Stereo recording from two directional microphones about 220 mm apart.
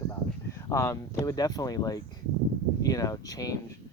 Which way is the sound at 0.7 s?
15° left (ahead or behind).